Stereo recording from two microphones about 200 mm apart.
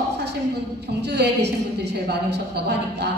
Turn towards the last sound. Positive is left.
turn(degrees=-55)  # may be behind; listen again after turning